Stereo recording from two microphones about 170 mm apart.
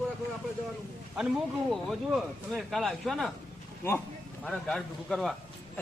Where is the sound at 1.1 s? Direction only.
5° right (ahead or behind).